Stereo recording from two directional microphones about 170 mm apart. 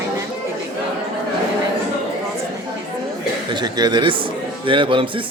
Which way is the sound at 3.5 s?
25° right (ahead or behind).